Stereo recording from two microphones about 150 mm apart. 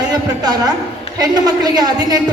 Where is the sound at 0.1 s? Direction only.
25° right (ahead or behind).